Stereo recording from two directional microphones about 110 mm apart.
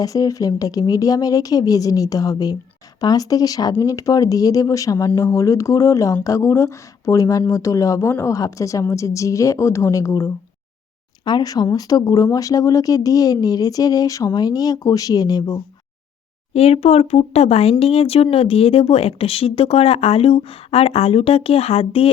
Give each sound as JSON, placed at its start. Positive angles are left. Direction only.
{"t": 0.0, "sound": "a woman's voice", "side_deg": 35}
{"t": 11.3, "sound": "speech", "side_deg": 40}
{"t": 16.6, "sound": "speech", "side_deg": 70}